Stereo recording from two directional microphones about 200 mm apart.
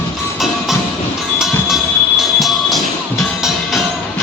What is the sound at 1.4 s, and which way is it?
Music, centre (ahead or behind).